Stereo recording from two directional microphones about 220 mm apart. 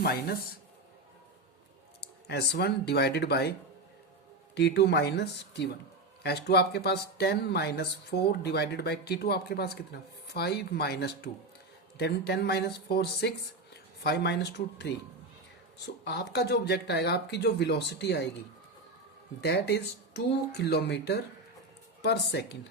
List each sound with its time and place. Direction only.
0.0 s speech: 45° left (ahead or behind)
2.0 s speech: 50° left (ahead or behind)
4.5 s speech: 50° left (ahead or behind)
16.0 s speech: 50° left (ahead or behind)
19.4 s speech: 50° left (ahead or behind)